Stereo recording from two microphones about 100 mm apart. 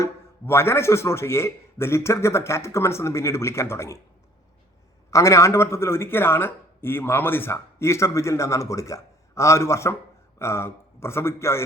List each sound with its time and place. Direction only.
0.0 s speech: 25° left (ahead or behind)
5.1 s a man's voice: 30° left (ahead or behind)